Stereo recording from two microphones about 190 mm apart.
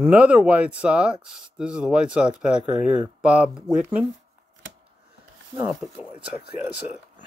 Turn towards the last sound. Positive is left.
turn(degrees=-20)  # may be behind; listen again after turning